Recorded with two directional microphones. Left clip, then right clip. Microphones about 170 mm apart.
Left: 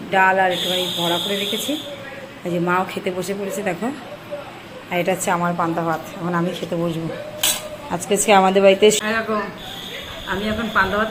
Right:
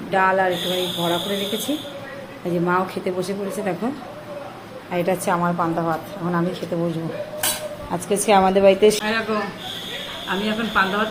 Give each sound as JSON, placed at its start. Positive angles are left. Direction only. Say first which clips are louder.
{"t": 0.1, "sound": "speech", "louder": "left 2 dB", "side_deg": 0}
{"t": 4.9, "sound": "speech", "louder": "left 1 dB", "side_deg": 0}
{"t": 7.9, "sound": "speech", "louder": "left 2 dB", "side_deg": 5}
{"t": 10.2, "sound": "speech", "louder": "left 1 dB", "side_deg": -15}